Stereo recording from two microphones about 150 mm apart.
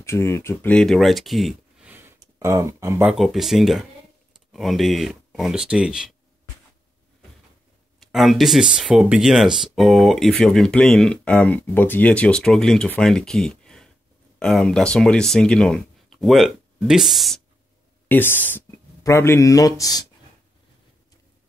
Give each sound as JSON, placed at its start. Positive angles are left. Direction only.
{"t": 0.0, "sound": "speech", "side_deg": 15}
{"t": 1.9, "sound": "a sound", "side_deg": -15}
{"t": 3.1, "sound": "speech", "side_deg": 0}
{"t": 8.0, "sound": "speech", "side_deg": 0}
{"t": 18.0, "sound": "a man's voice", "side_deg": 15}